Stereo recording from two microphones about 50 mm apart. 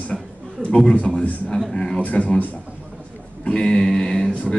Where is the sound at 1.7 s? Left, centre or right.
Centre.